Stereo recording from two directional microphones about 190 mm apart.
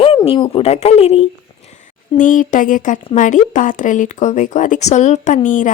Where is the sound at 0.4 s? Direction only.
35° left (ahead or behind).